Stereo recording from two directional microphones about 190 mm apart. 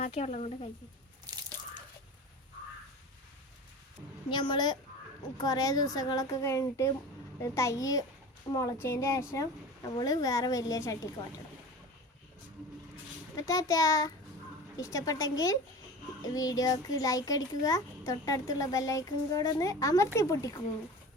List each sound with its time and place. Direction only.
0.0 s speech: 40° left (ahead or behind)
1.3 s water: 20° right (ahead or behind)
4.3 s a child's voice: 25° left (ahead or behind)
13.3 s a woman's voice: 15° left (ahead or behind)